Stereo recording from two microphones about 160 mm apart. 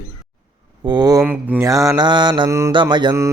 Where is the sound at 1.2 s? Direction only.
10° right (ahead or behind).